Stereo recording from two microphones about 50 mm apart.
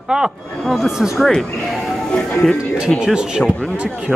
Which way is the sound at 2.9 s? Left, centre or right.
Centre.